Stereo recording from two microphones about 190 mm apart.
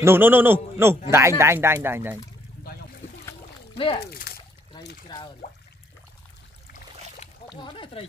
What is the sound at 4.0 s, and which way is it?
Speech, 55° left (ahead or behind).